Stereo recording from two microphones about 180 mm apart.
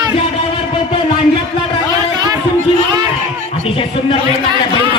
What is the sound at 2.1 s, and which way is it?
Music, 20° right (ahead or behind).